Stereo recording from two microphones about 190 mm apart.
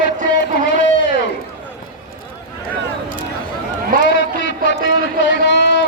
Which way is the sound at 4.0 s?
70° left (ahead or behind).